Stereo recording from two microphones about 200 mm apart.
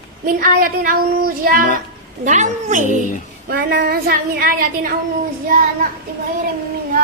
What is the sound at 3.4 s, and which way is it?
A woman's voice, 50° right (ahead or behind).